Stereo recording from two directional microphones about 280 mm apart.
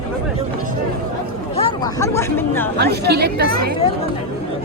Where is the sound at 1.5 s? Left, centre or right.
Centre.